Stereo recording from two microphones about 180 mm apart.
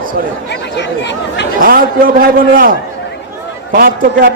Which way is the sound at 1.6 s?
55° right (ahead or behind).